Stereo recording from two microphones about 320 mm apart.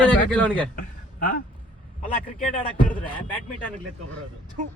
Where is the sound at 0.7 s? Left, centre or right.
Left.